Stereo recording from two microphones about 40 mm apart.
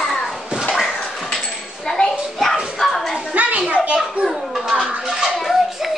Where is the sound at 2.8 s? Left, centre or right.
Centre.